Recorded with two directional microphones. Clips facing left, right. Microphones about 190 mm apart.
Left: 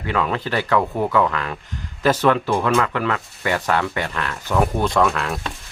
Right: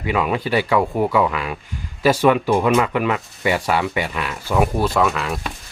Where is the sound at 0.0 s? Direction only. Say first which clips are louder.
Right 2 dB; 10° right (ahead or behind).